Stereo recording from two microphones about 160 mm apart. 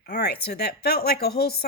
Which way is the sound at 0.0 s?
85° left.